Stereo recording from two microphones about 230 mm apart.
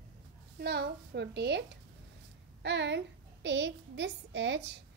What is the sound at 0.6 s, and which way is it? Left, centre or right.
A woman's voice, right.